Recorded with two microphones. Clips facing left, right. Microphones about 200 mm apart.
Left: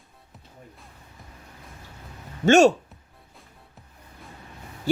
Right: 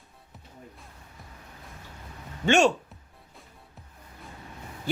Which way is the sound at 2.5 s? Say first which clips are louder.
Left 6 dB; 40° left (ahead or behind).